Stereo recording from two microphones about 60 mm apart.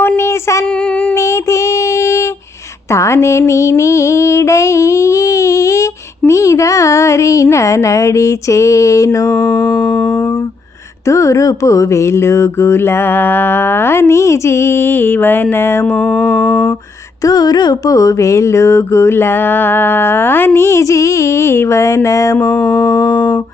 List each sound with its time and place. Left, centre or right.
0.2 s a sound: left
1.1 s child singing: left
2.9 s a sound: left
9.2 s mantra: left
11.0 s mantra: left
15.9 s mantra: centre
16.1 s mantra: left
17.2 s mantra: left
22.4 s mantra: left